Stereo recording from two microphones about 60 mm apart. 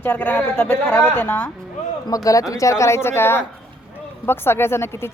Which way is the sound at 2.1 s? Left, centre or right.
Left.